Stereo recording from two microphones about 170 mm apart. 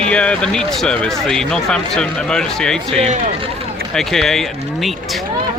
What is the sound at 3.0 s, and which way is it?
Speech, 40° right (ahead or behind).